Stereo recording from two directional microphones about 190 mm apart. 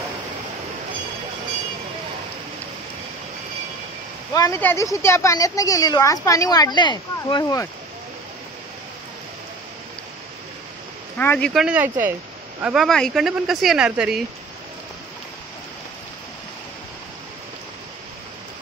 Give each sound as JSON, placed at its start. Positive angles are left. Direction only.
{"t": 4.3, "sound": "a woman's voice", "side_deg": 15}
{"t": 11.1, "sound": "speech", "side_deg": 10}